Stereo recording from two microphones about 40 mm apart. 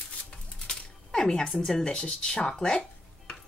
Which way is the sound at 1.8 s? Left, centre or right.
Left.